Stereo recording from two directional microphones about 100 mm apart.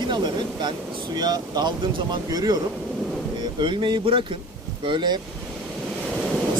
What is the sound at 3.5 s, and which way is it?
Speech, 50° right (ahead or behind).